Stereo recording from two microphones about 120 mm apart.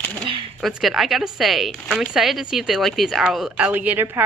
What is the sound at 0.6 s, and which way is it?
Speech, centre (ahead or behind).